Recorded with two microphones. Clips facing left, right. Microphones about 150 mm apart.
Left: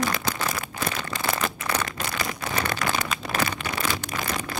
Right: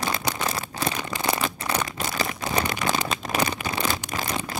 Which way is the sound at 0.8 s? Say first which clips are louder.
Right 2 dB; 20° right (ahead or behind).